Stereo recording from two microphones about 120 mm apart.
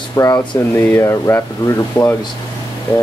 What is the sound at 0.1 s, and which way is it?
Speech, 30° left (ahead or behind).